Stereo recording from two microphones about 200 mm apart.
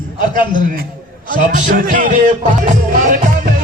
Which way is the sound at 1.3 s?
40° right (ahead or behind).